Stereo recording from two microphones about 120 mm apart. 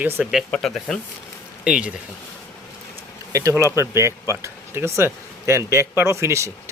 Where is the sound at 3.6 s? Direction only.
25° right (ahead or behind).